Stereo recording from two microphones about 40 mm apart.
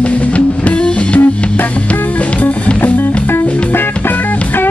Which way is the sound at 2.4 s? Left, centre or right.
Left.